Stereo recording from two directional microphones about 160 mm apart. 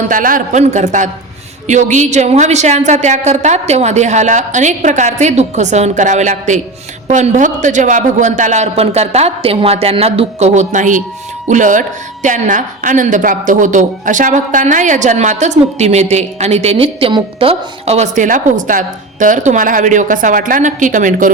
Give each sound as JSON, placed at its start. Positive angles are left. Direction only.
{"t": 0.1, "sound": "a woman's voice", "side_deg": -55}